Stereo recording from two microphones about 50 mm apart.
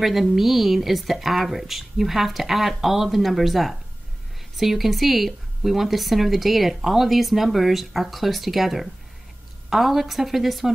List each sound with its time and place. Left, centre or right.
0.0 s speech: centre